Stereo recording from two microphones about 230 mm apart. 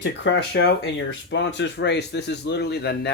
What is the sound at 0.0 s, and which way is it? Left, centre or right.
Speech, left.